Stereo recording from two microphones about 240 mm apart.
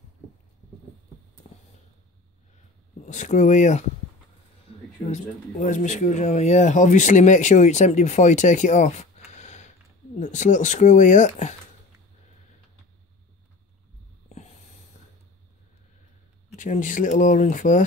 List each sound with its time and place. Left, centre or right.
1.5 s a sound: left
3.1 s speech: left
5.1 s speech: left
16.5 s speech: left